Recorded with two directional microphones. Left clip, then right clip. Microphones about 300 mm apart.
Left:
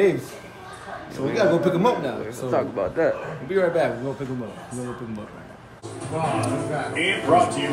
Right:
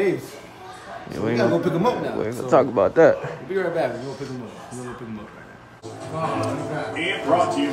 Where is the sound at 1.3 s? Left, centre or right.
Centre.